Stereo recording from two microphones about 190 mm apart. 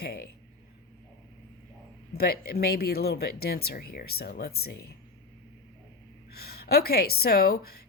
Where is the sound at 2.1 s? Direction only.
55° left (ahead or behind).